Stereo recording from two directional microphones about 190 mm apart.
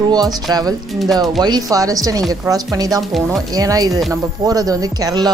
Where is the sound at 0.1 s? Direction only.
20° right (ahead or behind).